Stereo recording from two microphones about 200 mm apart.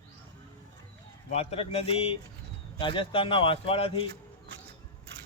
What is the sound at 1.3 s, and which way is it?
A man's voice, 30° left (ahead or behind).